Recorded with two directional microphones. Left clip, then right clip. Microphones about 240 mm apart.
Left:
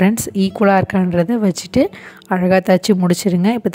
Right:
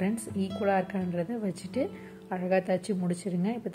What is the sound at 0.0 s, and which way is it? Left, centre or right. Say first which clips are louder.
Speech: left 15 dB; left.